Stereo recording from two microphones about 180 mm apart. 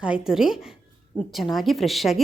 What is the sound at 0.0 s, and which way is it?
A woman's voice, 5° right (ahead or behind).